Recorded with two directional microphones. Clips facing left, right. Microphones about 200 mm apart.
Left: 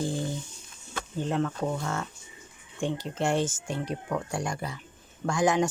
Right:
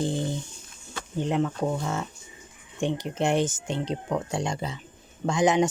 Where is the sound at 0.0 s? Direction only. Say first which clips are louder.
Right 3 dB; 20° right (ahead or behind).